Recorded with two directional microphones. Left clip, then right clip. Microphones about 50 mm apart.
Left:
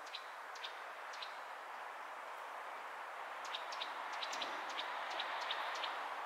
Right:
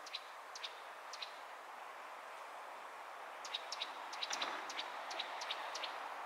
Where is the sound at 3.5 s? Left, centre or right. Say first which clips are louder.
Right 1 dB; right.